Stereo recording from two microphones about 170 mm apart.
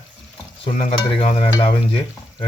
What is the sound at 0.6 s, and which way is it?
Stir, 30° left (ahead or behind).